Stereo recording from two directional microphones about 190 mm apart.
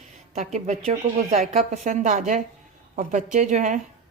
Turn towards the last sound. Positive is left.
turn(degrees=-40)  # may be behind; listen again after turning